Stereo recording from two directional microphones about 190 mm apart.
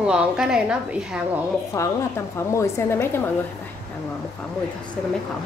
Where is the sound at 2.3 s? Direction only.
15° left (ahead or behind).